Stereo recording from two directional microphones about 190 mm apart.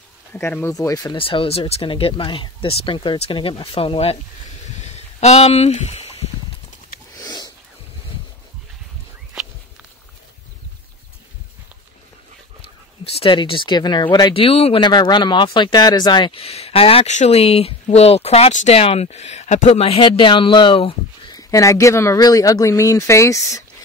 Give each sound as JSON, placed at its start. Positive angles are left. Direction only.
{"t": 0.3, "sound": "speech", "side_deg": 10}
{"t": 7.2, "sound": "a sound", "side_deg": 20}
{"t": 13.0, "sound": "speech", "side_deg": 30}